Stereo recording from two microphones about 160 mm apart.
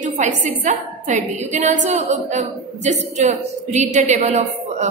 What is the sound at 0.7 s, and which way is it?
A woman's voice, 45° right (ahead or behind).